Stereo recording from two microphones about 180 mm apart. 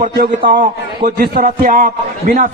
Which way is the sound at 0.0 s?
45° right (ahead or behind).